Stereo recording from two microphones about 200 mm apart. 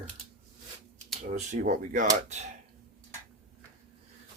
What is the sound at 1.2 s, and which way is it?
Speech, 40° right (ahead or behind).